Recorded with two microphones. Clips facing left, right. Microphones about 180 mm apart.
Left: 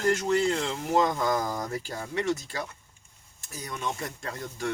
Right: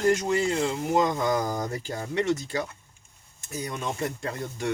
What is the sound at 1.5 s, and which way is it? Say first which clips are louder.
Speech: right 2 dB; 30° right (ahead or behind).